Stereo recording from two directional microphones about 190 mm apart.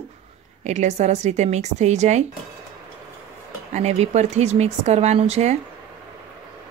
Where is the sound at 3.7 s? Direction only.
35° right (ahead or behind).